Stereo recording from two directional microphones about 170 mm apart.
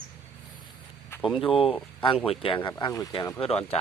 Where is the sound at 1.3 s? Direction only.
30° left (ahead or behind).